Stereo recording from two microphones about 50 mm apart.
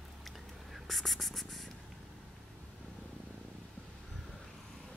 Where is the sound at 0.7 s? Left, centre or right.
Centre.